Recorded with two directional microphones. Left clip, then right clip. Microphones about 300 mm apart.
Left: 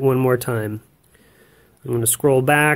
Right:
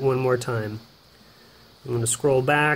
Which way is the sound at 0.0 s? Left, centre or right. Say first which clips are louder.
Left 4 dB; left.